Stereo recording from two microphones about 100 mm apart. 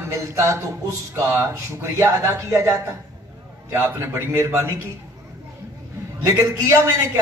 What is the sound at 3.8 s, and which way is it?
Speech, 25° right (ahead or behind).